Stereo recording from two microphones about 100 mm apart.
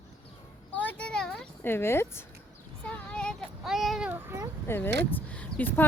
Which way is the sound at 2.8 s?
10° left (ahead or behind).